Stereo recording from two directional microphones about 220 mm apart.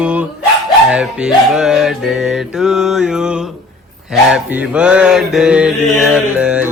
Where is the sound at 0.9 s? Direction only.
5° right (ahead or behind).